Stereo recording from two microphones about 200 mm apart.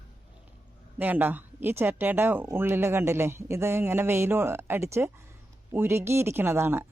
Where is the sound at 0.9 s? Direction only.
10° right (ahead or behind).